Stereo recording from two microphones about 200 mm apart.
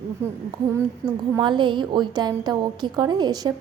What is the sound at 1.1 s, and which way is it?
A woman's voice, 20° right (ahead or behind).